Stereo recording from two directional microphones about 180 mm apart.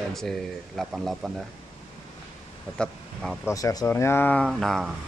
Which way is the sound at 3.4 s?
20° left (ahead or behind).